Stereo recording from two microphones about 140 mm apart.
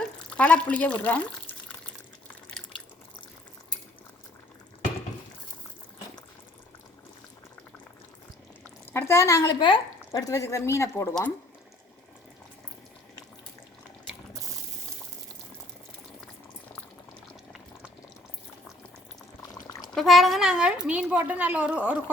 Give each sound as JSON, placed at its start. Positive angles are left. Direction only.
{"t": 0.3, "sound": "speech", "side_deg": 10}
{"t": 8.9, "sound": "speech", "side_deg": 15}
{"t": 9.6, "sound": "speech", "side_deg": 35}
{"t": 19.9, "sound": "a woman's voice", "side_deg": 0}